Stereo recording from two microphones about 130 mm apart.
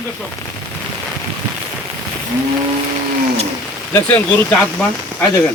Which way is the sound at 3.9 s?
15° left (ahead or behind).